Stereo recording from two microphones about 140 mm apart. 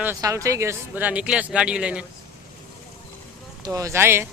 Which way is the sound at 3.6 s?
20° right (ahead or behind).